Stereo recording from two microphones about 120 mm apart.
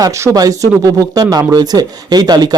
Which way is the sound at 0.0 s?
25° right (ahead or behind).